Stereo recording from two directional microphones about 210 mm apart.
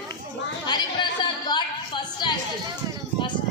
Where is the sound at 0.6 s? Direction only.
20° left (ahead or behind).